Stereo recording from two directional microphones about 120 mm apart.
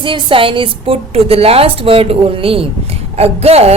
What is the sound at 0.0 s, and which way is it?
A woman's voice, 45° right (ahead or behind).